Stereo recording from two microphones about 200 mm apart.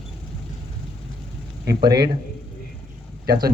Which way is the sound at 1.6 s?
55° right (ahead or behind).